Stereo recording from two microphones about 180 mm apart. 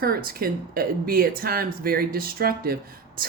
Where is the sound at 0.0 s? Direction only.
55° right (ahead or behind).